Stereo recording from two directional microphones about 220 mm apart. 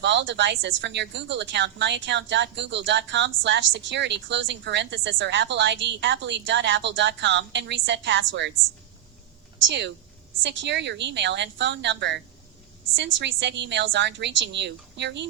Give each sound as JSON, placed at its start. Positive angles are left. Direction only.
{"t": 0.0, "sound": "a woman's voice", "side_deg": -55}
{"t": 9.6, "sound": "a woman's voice", "side_deg": -55}